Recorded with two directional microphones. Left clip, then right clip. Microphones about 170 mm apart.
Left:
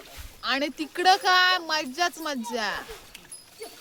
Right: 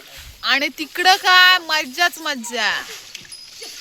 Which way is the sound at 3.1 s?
70° left (ahead or behind).